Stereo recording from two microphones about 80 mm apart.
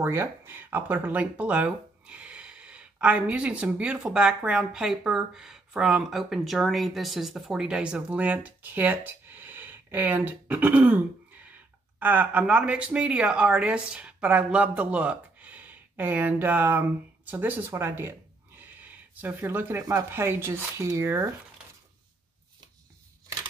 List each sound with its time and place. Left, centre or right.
0.0 s speech: right
12.0 s speech: right